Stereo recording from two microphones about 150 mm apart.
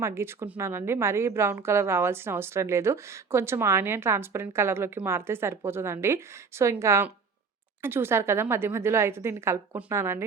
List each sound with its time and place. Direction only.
0.0 s a woman's voice: 15° right (ahead or behind)